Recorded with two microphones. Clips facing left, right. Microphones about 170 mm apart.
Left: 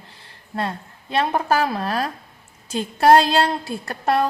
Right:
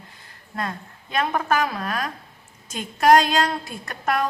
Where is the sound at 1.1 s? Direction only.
30° left (ahead or behind).